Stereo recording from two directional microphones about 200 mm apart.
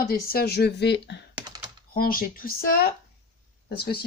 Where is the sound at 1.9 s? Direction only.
45° left (ahead or behind).